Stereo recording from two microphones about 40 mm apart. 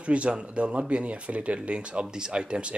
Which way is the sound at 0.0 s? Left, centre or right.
Right.